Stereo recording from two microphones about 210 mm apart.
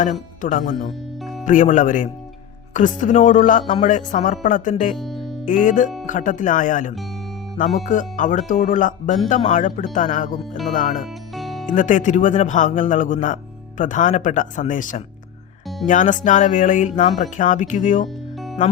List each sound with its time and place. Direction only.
0.0 s speech: 40° left (ahead or behind)
4.9 s music: centre (ahead or behind)
5.5 s speech: 40° left (ahead or behind)
11.3 s music: centre (ahead or behind)
11.7 s speech: 40° left (ahead or behind)